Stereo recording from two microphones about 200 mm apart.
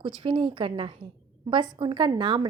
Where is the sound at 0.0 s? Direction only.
25° right (ahead or behind).